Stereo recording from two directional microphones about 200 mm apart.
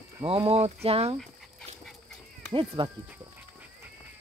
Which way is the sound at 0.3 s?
30° right (ahead or behind).